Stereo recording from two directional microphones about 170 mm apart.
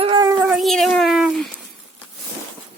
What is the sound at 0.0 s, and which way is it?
Dog, 30° right (ahead or behind).